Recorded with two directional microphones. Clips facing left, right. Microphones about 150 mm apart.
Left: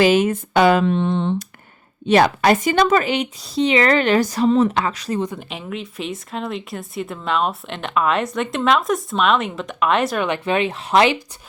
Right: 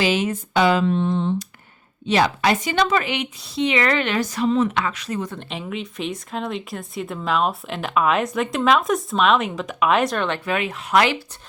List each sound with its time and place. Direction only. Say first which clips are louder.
0.0 s speech: left 6 dB; 50° left (ahead or behind); by 1.5 s 65° left (ahead or behind)
2.0 s speech: left 4 dB; 55° left (ahead or behind); by 5.2 s 35° left (ahead or behind)
5.4 s speech: even; centre (ahead or behind)
10.2 s speech: left 3 dB; 15° left (ahead or behind)
10.5 s speech: left 3 dB; 30° left (ahead or behind)